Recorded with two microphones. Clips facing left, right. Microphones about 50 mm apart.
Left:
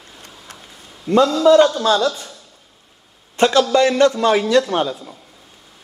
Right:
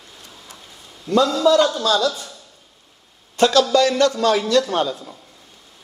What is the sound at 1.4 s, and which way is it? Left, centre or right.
Speech, left.